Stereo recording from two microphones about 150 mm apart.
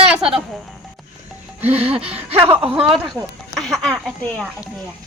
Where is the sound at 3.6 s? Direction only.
5° left (ahead or behind).